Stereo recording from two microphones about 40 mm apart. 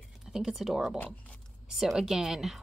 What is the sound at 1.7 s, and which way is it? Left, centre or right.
Speech, centre.